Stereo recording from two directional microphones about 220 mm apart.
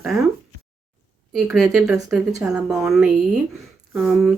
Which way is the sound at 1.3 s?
Centre (ahead or behind).